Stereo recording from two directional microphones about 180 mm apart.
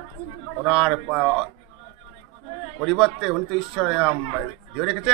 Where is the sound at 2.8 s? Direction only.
5° right (ahead or behind).